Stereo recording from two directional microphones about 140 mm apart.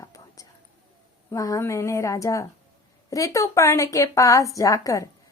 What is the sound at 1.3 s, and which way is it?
A woman's voice, 20° left (ahead or behind).